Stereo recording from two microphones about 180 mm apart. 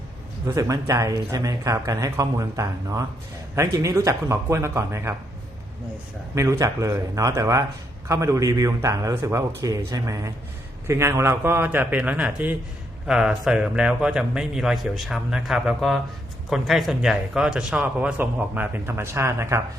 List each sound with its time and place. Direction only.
0.4 s speech: 15° right (ahead or behind)
6.3 s a man's voice: 15° right (ahead or behind)